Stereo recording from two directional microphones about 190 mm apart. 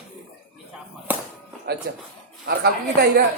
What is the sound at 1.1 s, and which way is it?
Music, 10° right (ahead or behind).